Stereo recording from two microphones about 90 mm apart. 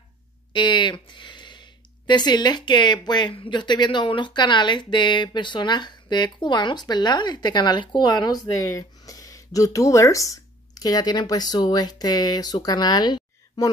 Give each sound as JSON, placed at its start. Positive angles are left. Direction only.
{"t": 0.5, "sound": "speech", "side_deg": 60}